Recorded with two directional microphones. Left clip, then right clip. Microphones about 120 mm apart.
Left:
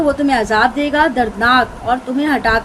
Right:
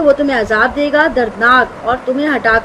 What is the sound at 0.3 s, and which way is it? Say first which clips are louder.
A woman's voice: right 1 dB; 40° left (ahead or behind).